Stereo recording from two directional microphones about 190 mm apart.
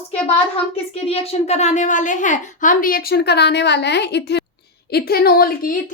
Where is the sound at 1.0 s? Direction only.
30° left (ahead or behind).